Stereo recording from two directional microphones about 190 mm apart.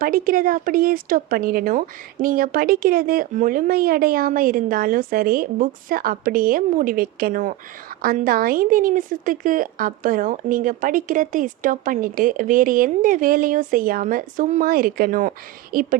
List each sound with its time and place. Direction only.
0.0 s a woman's voice: 50° right (ahead or behind)